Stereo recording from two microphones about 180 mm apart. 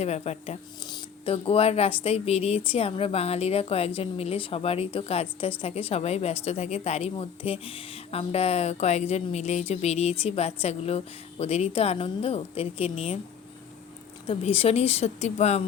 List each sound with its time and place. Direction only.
0.0 s speech: 35° left (ahead or behind)
0.9 s speech: 25° left (ahead or behind)
14.3 s speech: 35° left (ahead or behind)